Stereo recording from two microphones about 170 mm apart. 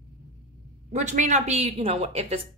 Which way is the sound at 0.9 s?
45° right (ahead or behind).